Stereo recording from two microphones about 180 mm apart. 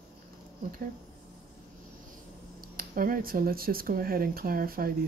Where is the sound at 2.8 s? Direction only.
55° right (ahead or behind).